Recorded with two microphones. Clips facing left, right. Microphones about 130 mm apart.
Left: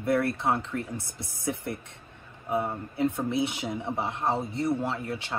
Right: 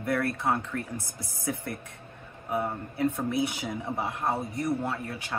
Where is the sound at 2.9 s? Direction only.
25° left (ahead or behind).